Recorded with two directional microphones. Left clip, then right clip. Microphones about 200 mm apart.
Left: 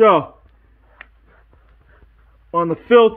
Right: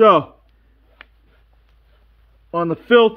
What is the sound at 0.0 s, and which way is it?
Speech, 20° right (ahead or behind).